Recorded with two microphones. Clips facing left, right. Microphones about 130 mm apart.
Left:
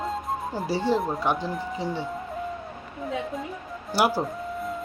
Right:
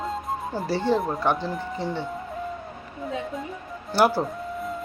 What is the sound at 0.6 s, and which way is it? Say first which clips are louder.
Speech: right 1 dB; 10° left (ahead or behind).